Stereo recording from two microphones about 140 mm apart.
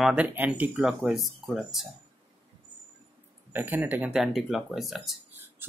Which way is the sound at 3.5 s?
15° right (ahead or behind).